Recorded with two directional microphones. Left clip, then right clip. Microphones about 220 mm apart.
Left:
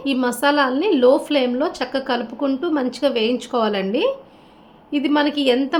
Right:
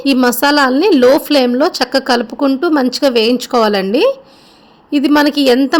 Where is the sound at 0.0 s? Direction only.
50° right (ahead or behind).